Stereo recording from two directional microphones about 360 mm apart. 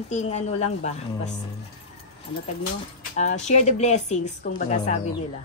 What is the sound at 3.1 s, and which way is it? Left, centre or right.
A woman's voice, centre.